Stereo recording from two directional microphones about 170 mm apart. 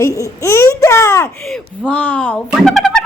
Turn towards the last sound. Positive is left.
turn(degrees=5)  # may be behind; listen again after turning